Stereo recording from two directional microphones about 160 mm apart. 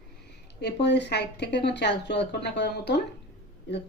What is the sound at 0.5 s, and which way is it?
Speech, 90° left.